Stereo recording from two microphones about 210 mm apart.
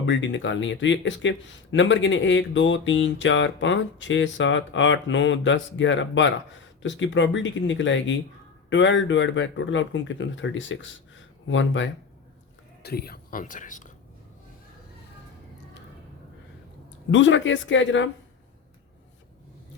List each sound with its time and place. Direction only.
0.0 s speech: 60° left (ahead or behind)
12.8 s speech: 50° left (ahead or behind)
17.1 s speech: 60° left (ahead or behind)